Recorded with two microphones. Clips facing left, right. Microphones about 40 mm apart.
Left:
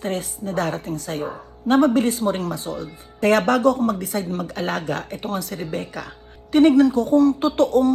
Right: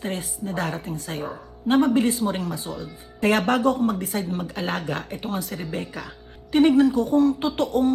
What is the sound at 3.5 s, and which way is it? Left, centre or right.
A woman's voice, right.